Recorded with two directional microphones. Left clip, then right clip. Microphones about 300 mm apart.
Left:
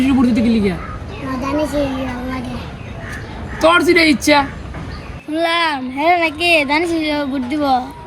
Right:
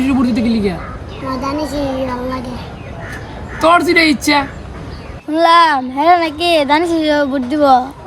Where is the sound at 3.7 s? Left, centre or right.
Centre.